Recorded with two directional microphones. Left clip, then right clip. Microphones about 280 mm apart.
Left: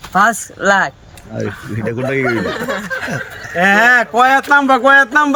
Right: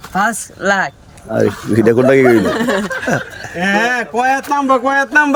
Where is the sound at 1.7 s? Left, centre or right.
Centre.